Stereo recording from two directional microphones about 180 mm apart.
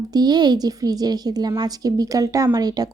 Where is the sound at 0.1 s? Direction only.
20° right (ahead or behind).